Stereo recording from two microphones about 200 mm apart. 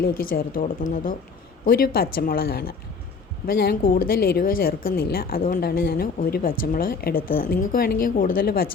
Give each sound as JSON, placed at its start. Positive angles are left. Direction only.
{"t": 0.0, "sound": "speech", "side_deg": 45}